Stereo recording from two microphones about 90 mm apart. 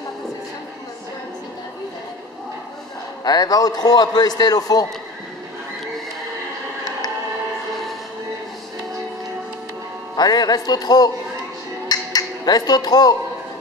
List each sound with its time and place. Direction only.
3.3 s a man's voice: 45° left (ahead or behind)
10.1 s a man's voice: 50° left (ahead or behind)
11.9 s finger snapping: 45° left (ahead or behind)